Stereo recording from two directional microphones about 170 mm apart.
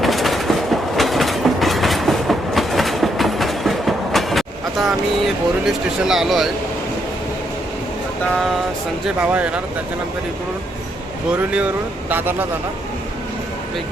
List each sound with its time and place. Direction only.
0.0 s train: centre (ahead or behind)
9.0 s speech: 10° right (ahead or behind)
11.5 s speech: 10° right (ahead or behind)